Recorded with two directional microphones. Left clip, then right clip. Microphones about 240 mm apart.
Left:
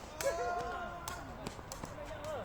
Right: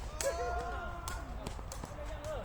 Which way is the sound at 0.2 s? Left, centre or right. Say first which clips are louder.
Left 1 dB; centre.